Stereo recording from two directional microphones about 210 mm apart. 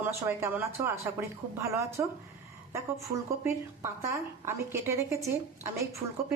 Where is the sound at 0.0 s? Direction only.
10° right (ahead or behind).